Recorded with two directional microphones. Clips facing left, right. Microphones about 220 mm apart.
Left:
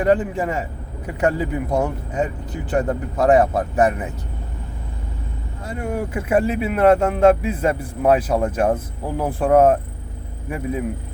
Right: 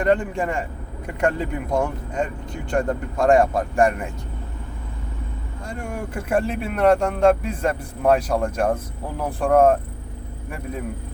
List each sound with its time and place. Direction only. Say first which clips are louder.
0.0 s speech: left 2 dB; 5° left (ahead or behind)
5.6 s speech: left 5 dB; 5° left (ahead or behind)